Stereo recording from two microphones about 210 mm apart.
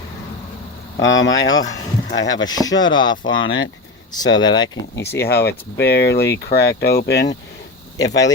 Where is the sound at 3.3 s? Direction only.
65° left (ahead or behind).